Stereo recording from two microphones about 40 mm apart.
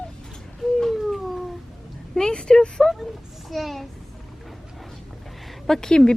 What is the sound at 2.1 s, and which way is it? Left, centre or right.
Speech, left.